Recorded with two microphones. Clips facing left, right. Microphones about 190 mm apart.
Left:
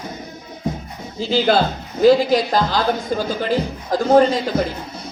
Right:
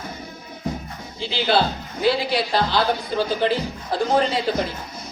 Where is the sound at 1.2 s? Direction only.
45° left (ahead or behind).